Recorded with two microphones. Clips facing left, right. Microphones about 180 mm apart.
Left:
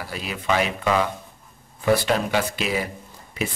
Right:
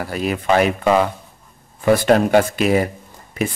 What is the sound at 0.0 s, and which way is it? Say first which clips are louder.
Speech: right 8 dB; 50° right (ahead or behind).